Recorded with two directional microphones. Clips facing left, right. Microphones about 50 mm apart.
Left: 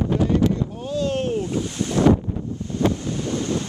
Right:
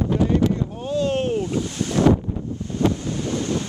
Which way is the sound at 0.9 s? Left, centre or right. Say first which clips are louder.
Right 2 dB; centre.